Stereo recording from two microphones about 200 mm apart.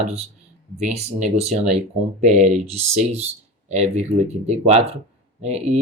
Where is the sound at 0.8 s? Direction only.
35° right (ahead or behind).